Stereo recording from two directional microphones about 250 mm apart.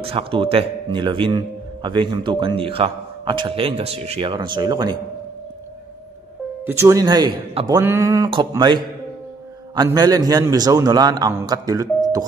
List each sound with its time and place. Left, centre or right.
0.0 s a man's voice: right
6.6 s a man's voice: centre
9.8 s a man's voice: centre